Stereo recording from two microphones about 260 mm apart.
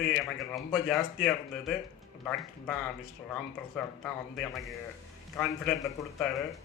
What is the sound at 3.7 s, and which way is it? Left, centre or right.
A man's voice, centre.